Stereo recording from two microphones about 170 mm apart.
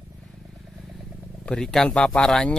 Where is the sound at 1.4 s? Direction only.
5° left (ahead or behind).